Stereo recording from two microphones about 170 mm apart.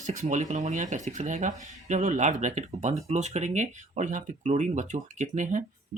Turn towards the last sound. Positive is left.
turn(degrees=-45)  # may be behind; listen again after turning